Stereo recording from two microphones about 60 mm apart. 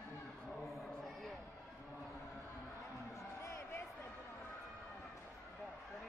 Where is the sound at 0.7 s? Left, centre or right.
Centre.